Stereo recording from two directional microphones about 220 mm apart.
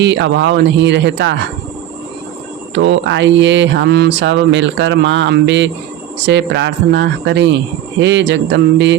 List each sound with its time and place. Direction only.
0.0 s speech: 55° right (ahead or behind)
2.7 s speech: 55° right (ahead or behind)